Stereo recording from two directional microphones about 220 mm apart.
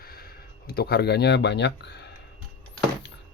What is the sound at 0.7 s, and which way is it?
Speech, 45° left (ahead or behind).